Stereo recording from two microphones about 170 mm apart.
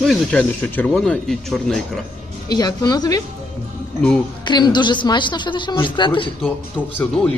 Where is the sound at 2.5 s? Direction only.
25° left (ahead or behind).